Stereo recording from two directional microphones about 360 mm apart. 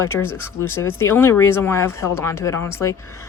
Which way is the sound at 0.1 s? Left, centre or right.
Centre.